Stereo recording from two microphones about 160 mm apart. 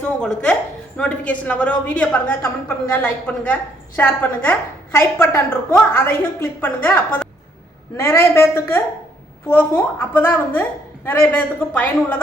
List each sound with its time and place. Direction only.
0.2 s a woman's voice: 5° left (ahead or behind)